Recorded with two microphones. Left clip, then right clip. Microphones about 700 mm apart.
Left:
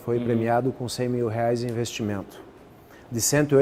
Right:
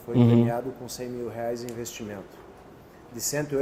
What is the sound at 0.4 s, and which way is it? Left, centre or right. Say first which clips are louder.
Speech: left 6 dB; left.